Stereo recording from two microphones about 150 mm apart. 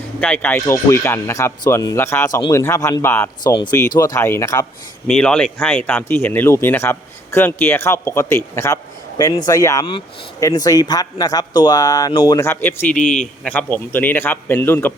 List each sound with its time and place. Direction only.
0.2 s speech: 10° left (ahead or behind)
3.4 s speech: 30° left (ahead or behind)
5.0 s speech: 5° left (ahead or behind); by 12.4 s 30° left (ahead or behind)
12.4 s speech: 15° left (ahead or behind)
12.9 s speech: 60° left (ahead or behind)
13.4 s speech: 10° left (ahead or behind)